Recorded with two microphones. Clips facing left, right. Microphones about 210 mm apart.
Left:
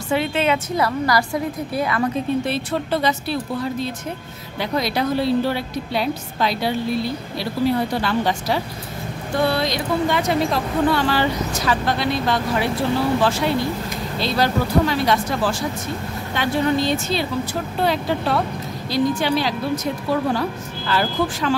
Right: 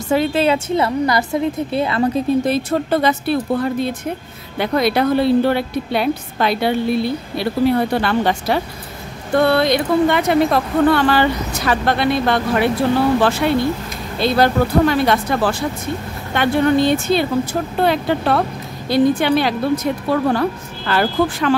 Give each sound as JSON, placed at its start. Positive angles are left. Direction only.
{"t": 0.1, "sound": "a woman's voice", "side_deg": -40}
{"t": 2.4, "sound": "a woman's voice", "side_deg": -45}
{"t": 14.2, "sound": "a woman's voice", "side_deg": -55}